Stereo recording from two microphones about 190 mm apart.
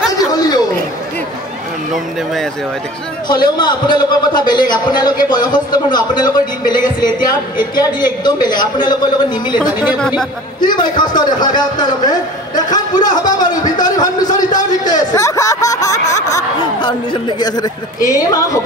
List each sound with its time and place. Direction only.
0.3 s chatter: 20° left (ahead or behind)
3.3 s a man's voice: 25° left (ahead or behind)
9.6 s speech: 5° right (ahead or behind)
9.9 s speech: 5° left (ahead or behind)
10.8 s a man's voice: 25° left (ahead or behind)